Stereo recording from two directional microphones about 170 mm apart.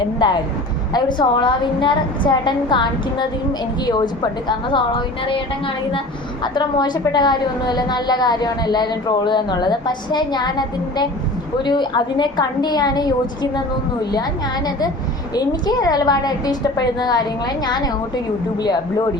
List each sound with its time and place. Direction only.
0.0 s a woman's voice: 25° left (ahead or behind)
6.4 s a woman's voice: 25° left (ahead or behind)
15.4 s a woman's voice: 25° left (ahead or behind)